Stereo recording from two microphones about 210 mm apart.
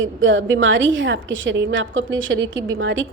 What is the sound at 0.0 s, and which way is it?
A woman's voice, 65° right (ahead or behind).